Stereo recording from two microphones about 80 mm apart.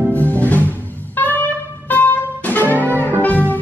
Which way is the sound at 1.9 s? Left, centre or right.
Left.